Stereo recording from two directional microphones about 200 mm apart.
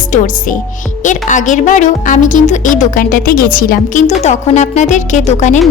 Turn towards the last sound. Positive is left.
turn(degrees=35)  # may be behind; listen again after turning